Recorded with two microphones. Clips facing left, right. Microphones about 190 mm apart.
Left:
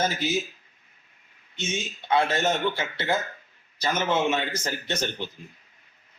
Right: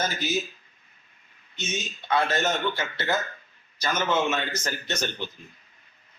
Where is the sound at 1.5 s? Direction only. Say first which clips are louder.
Left 2 dB; 25° left (ahead or behind).